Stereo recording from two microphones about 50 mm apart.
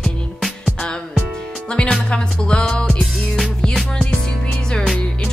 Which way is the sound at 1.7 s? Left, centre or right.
Centre.